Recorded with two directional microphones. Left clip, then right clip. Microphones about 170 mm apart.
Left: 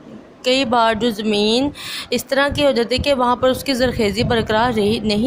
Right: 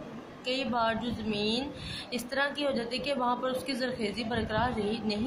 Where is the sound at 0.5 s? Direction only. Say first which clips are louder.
Left 14 dB; 55° left (ahead or behind).